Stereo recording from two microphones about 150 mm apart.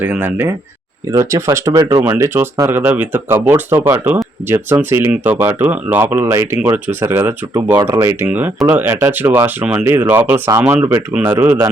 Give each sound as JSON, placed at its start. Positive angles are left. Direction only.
{"t": 0.0, "sound": "speech", "side_deg": -15}
{"t": 7.8, "sound": "speech", "side_deg": -25}